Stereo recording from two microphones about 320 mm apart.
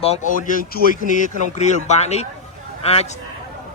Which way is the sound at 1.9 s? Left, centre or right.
Centre.